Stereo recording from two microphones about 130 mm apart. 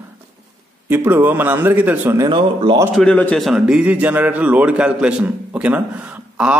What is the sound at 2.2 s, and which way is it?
Speech, 40° right (ahead or behind).